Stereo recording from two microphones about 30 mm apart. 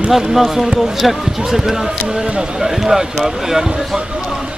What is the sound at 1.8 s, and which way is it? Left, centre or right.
Speech, centre.